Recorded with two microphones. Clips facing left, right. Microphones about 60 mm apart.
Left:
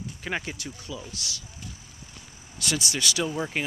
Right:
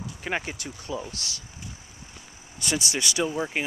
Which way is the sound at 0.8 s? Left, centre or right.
Right.